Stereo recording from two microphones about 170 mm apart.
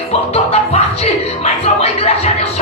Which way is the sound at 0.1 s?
35° left (ahead or behind).